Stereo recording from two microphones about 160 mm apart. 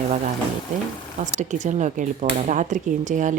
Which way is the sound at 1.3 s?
50° right (ahead or behind).